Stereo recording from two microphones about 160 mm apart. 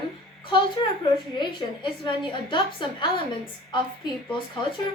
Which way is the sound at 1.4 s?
30° left (ahead or behind).